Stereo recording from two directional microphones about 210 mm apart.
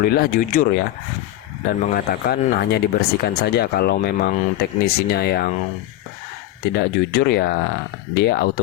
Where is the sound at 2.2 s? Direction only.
50° left (ahead or behind).